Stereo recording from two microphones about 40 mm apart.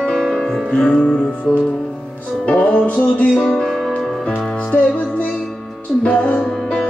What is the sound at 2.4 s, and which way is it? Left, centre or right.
Music, left.